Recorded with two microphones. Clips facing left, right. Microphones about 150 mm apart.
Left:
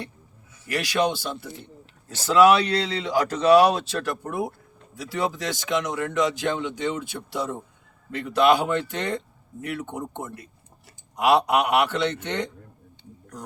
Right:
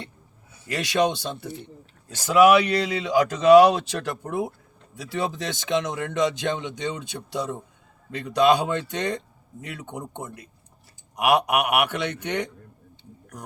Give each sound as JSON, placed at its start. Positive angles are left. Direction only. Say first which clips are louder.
{"t": 0.7, "sound": "speech", "louder": "right 1 dB", "side_deg": -20}